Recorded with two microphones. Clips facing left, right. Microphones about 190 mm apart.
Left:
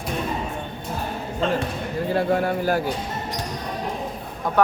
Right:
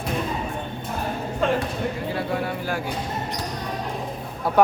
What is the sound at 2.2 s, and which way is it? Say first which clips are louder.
Speech: left 5 dB; 45° left (ahead or behind).